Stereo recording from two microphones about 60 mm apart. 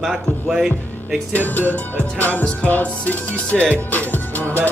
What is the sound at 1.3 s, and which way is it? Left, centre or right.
Music, left.